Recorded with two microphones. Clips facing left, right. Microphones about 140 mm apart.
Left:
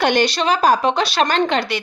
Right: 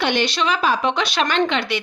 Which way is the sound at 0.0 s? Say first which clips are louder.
Left 3 dB; 40° left (ahead or behind).